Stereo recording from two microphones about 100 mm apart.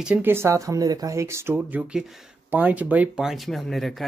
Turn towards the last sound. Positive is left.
turn(degrees=0)  # may be behind; listen again after turning